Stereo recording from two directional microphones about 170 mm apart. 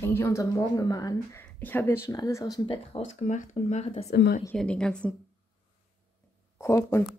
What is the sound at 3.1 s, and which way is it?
Speech, 45° left (ahead or behind).